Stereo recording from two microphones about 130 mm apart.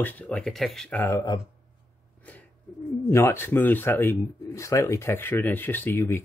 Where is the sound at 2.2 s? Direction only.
10° left (ahead or behind).